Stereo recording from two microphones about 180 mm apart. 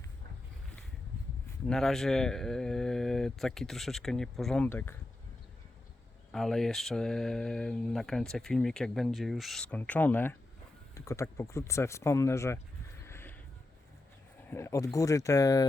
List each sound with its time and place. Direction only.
1.6 s speech: 5° left (ahead or behind)
6.3 s speech: centre (ahead or behind)
13.1 s a sound: 15° left (ahead or behind)
14.5 s speech: 15° left (ahead or behind)